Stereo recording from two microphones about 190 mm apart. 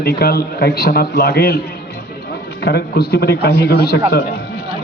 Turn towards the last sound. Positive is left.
turn(degrees=55)  # may be behind; listen again after turning